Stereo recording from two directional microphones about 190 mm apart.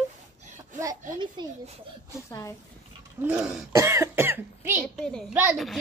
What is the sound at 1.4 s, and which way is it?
Speech, 25° right (ahead or behind).